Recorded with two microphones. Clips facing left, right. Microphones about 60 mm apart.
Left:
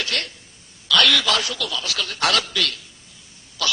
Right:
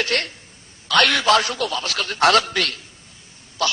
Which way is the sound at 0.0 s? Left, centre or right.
Right.